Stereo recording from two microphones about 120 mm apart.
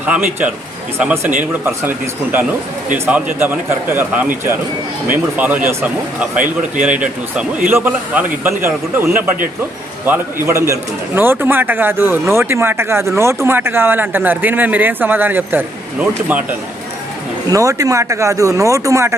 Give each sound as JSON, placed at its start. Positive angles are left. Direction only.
{"t": 0.0, "sound": "a man's voice", "side_deg": -15}
{"t": 10.4, "sound": "a man's voice", "side_deg": -25}
{"t": 17.5, "sound": "speech", "side_deg": -25}